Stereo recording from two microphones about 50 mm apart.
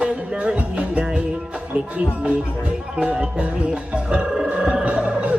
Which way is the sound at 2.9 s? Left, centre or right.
Centre.